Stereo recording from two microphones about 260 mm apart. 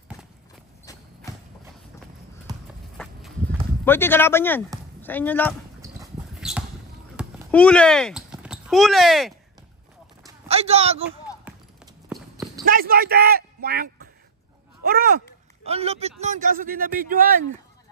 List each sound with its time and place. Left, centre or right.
0.9 s clip-clop: centre
2.5 s clip-clop: centre
3.8 s speech: centre
5.8 s a sound: centre
7.5 s speech: centre
10.2 s a sound: right
11.4 s clip-clop: centre
12.6 s a man's voice: right
15.6 s speech: right